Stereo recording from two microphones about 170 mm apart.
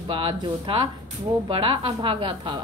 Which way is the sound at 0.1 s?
30° right (ahead or behind).